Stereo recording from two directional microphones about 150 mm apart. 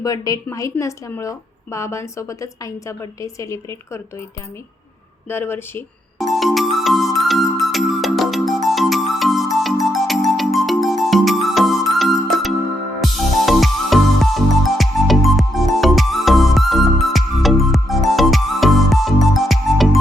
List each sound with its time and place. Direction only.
0.0 s a woman's voice: 25° left (ahead or behind)
5.3 s speech: 15° left (ahead or behind)
6.1 s music: centre (ahead or behind)